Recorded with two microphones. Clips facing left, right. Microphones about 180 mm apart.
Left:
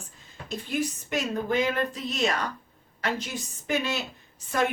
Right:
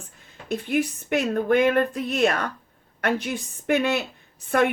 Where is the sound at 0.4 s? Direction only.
60° right (ahead or behind).